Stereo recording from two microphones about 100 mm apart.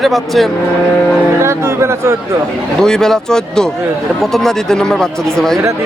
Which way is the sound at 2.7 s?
5° left (ahead or behind).